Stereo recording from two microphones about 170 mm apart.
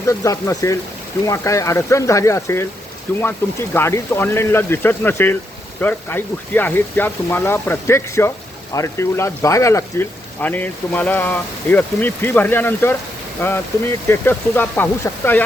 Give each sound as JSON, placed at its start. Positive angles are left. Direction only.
{"t": 0.1, "sound": "speech", "side_deg": 20}